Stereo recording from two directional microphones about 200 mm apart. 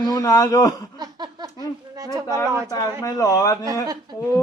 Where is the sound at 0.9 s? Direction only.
20° right (ahead or behind).